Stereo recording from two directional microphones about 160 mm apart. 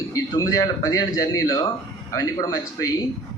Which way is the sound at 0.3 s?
20° left (ahead or behind).